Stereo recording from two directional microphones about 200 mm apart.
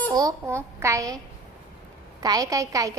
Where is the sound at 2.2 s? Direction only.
20° right (ahead or behind).